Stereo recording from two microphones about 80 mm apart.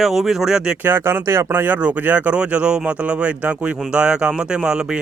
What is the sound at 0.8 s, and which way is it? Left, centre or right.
Speech, right.